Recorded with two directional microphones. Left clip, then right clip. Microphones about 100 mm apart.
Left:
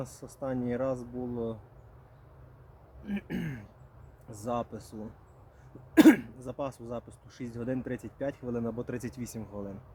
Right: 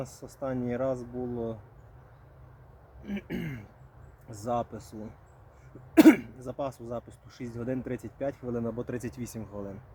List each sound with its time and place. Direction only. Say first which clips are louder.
0.0 s speech: right 2 dB; 15° left (ahead or behind)
3.1 s speech: right 1 dB; 15° left (ahead or behind)